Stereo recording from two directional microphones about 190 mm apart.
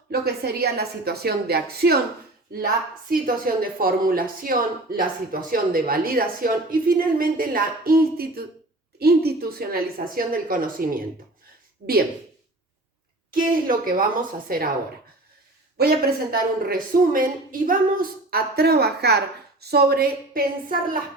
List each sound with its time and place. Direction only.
0.1 s a woman's voice: 55° right (ahead or behind)
13.5 s speech: 45° right (ahead or behind)
15.8 s speech: 50° right (ahead or behind)